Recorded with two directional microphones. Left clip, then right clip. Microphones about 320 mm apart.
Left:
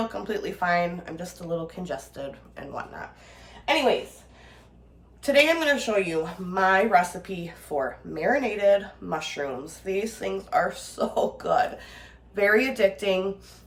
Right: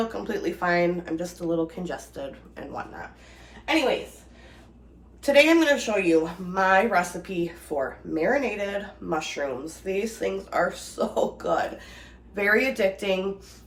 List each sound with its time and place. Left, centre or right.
0.1 s a woman's voice: centre
5.2 s a woman's voice: centre